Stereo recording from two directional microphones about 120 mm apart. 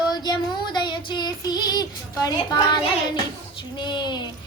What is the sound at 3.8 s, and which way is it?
Child singing, 40° left (ahead or behind).